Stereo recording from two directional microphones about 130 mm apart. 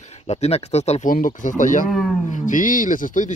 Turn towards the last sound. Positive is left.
turn(degrees=85)